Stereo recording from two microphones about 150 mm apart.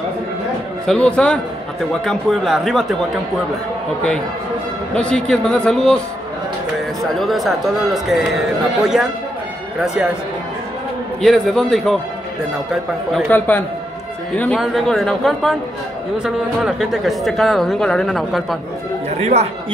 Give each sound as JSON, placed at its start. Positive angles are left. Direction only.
{"t": 0.8, "sound": "a man's voice", "side_deg": 5}
{"t": 4.9, "sound": "a man's voice", "side_deg": 5}
{"t": 7.0, "sound": "a man's voice", "side_deg": 0}
{"t": 11.1, "sound": "a man's voice", "side_deg": 0}
{"t": 13.3, "sound": "a man's voice", "side_deg": 10}
{"t": 19.0, "sound": "a sound", "side_deg": -45}